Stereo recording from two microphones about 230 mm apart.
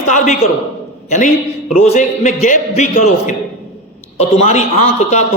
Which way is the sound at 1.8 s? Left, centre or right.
Left.